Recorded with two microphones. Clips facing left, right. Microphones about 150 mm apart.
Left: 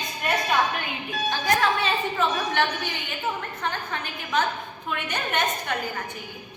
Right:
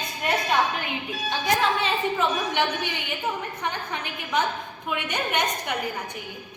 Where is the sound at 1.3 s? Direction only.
20° right (ahead or behind).